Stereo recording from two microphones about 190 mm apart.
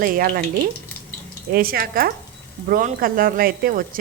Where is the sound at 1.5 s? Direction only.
50° right (ahead or behind).